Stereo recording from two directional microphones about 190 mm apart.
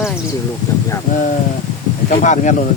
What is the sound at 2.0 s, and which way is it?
Speech, 40° left (ahead or behind).